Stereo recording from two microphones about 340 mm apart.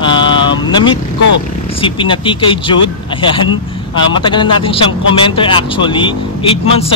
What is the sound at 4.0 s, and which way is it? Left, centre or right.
Speech, centre.